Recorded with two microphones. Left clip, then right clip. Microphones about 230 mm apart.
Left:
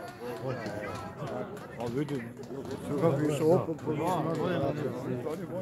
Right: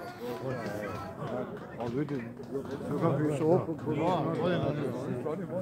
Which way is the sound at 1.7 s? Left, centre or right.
Left.